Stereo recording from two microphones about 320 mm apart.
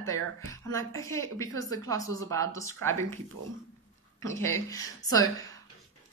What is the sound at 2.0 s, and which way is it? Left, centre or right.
Speech, right.